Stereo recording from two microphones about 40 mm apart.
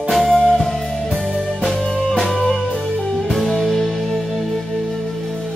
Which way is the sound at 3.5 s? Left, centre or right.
Centre.